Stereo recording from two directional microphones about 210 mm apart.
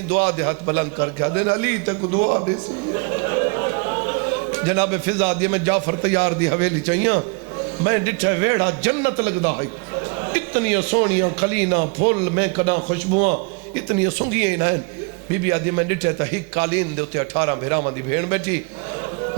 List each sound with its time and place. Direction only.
0.1 s a man's voice: 10° right (ahead or behind)
13.1 s a man's voice: 45° right (ahead or behind)
13.7 s a man's voice: 15° right (ahead or behind)